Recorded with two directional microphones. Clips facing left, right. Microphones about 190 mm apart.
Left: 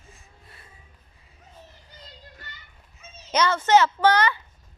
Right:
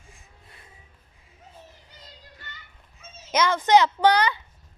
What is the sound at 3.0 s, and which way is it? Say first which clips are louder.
A child's voice: even; 10° right (ahead or behind).